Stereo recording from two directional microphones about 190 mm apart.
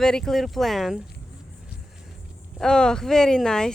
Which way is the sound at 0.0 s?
5° left (ahead or behind).